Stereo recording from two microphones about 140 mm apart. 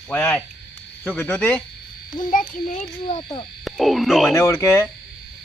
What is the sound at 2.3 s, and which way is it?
Speech, 70° left (ahead or behind).